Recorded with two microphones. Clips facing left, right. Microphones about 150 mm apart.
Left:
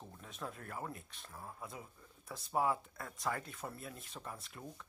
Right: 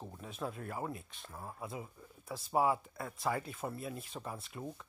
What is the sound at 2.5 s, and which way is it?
Speech, 10° right (ahead or behind).